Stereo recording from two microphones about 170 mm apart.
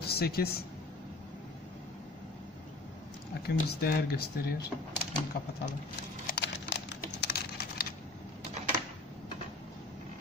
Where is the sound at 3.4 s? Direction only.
65° left (ahead or behind).